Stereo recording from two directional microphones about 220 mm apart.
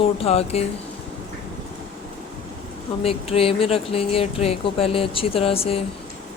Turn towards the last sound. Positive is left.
turn(degrees=25)  # may be behind; listen again after turning